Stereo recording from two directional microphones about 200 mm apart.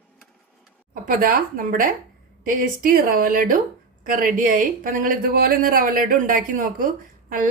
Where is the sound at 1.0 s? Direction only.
45° right (ahead or behind).